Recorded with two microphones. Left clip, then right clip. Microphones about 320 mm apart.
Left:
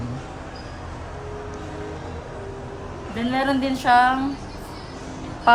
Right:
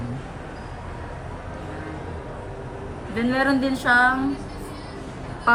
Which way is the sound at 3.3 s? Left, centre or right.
Centre.